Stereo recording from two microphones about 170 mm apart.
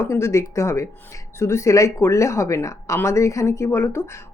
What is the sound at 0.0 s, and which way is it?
Speech, 15° left (ahead or behind).